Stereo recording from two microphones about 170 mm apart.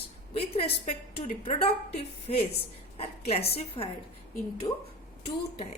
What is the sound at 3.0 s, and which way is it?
Speech, 35° left (ahead or behind).